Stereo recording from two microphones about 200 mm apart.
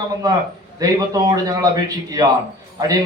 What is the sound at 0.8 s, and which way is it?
A man's voice, 20° right (ahead or behind).